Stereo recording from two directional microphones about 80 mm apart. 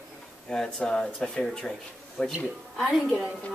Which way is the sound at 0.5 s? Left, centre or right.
Centre.